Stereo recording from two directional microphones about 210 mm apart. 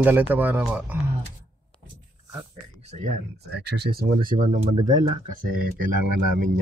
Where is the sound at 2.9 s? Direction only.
35° right (ahead or behind).